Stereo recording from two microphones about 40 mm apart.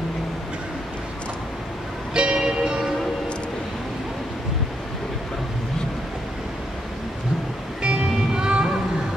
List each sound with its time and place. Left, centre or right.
2.1 s music: right
7.8 s music: right